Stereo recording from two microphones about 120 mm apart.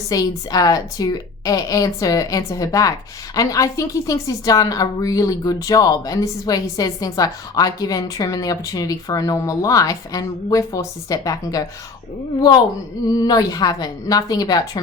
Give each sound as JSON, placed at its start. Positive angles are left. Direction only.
{"t": 0.1, "sound": "a woman's voice", "side_deg": 30}
{"t": 13.2, "sound": "a woman's voice", "side_deg": 35}